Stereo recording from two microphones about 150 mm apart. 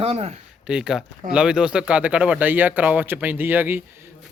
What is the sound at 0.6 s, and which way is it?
A man's voice, 5° right (ahead or behind).